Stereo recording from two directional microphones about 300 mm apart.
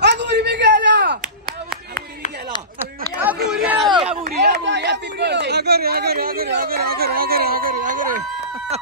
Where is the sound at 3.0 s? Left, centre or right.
Right.